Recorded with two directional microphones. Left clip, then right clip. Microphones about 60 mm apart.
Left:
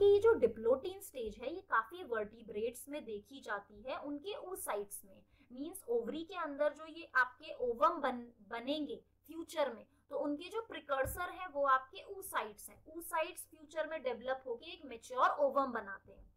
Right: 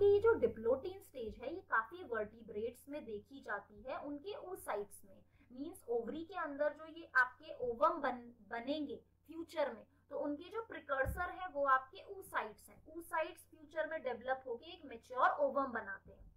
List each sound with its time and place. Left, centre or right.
0.0 s a sound: left
2.2 s a woman's voice: left
5.5 s a woman's voice: centre
5.9 s a woman's voice: left